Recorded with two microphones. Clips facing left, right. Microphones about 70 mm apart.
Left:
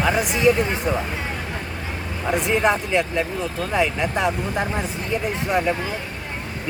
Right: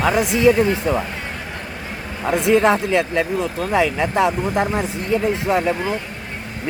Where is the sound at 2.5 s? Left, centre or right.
Right.